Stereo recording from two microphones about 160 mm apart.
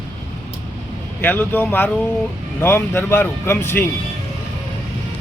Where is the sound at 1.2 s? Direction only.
10° left (ahead or behind).